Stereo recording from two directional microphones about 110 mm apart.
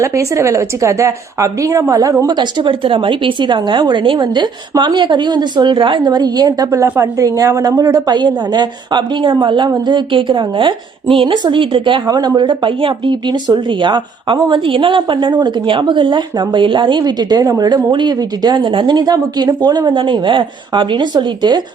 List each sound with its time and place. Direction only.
0.0 s a woman's voice: 25° right (ahead or behind); by 21.6 s 40° right (ahead or behind)